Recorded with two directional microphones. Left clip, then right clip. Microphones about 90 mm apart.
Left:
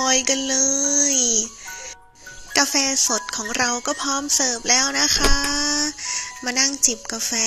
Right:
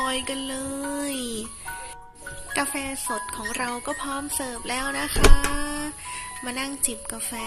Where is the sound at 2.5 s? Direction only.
65° left (ahead or behind).